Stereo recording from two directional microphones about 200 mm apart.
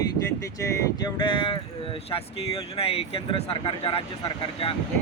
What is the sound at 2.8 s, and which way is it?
Speech, 30° left (ahead or behind).